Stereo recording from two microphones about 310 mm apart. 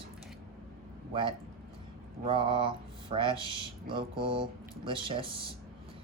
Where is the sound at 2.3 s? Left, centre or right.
Centre.